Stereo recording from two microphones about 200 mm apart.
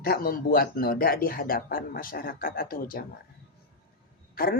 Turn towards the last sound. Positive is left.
turn(degrees=50)  # may be behind; listen again after turning